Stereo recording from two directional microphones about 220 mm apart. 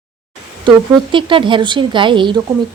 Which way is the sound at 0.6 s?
20° right (ahead or behind).